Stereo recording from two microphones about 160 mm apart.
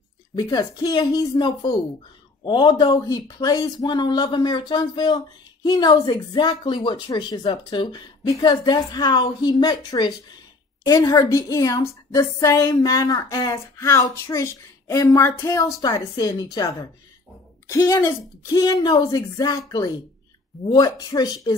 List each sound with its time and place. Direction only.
0.4 s speech: 25° left (ahead or behind)